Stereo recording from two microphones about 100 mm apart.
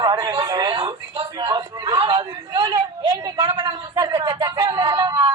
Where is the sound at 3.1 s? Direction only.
25° right (ahead or behind).